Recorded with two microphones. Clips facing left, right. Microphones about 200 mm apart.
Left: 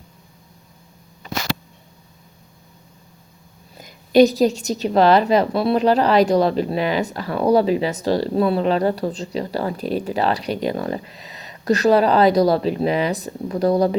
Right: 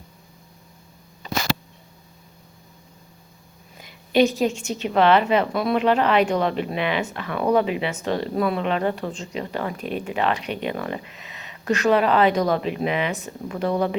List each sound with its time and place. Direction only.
3.8 s a woman's voice: 40° left (ahead or behind)